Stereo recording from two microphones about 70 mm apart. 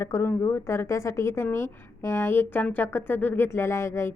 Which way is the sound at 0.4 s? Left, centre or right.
Left.